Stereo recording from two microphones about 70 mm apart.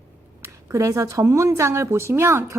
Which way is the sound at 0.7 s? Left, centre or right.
Right.